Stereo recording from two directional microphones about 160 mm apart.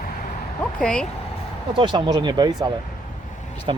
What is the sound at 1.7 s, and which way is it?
Speech, 30° right (ahead or behind).